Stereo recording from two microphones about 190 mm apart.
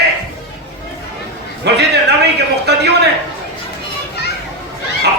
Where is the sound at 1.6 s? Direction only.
60° right (ahead or behind).